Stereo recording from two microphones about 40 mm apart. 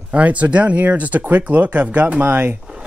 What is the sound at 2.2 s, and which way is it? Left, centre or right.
Speech, right.